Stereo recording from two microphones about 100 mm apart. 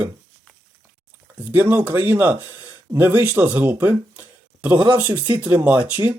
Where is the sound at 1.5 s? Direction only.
15° right (ahead or behind).